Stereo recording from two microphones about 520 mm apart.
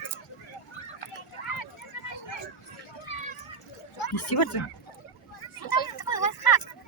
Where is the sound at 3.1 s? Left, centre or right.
Left.